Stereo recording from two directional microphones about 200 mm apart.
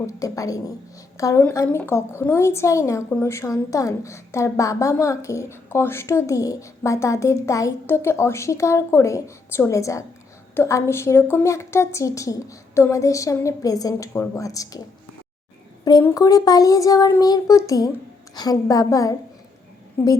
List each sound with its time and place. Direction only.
0.1 s a woman's voice: 15° left (ahead or behind)
15.8 s a woman's voice: 20° left (ahead or behind)